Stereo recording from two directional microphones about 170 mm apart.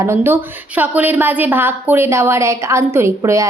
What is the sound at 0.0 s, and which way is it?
A woman's voice, 15° right (ahead or behind).